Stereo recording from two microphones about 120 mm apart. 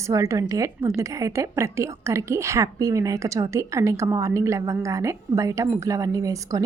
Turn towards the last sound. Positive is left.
turn(degrees=-30)  # may be behind; listen again after turning